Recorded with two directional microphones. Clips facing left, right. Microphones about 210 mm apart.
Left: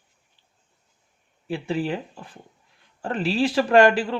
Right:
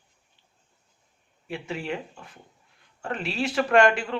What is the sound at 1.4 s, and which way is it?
Speech, 35° left (ahead or behind).